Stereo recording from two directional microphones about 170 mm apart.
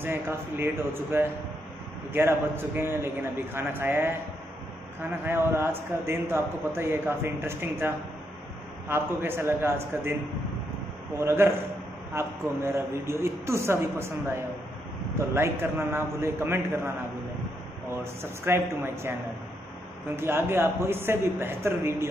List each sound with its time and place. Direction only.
0.0 s a man's voice: 15° right (ahead or behind)
5.2 s a man's voice: 15° right (ahead or behind)
11.1 s a man's voice: 15° right (ahead or behind)
15.1 s a man's voice: 15° right (ahead or behind)
18.2 s a man's voice: 15° right (ahead or behind)
20.2 s a man's voice: 15° right (ahead or behind)